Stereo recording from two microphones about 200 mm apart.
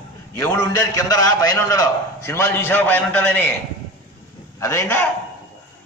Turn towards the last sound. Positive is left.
turn(degrees=10)  # may be behind; listen again after turning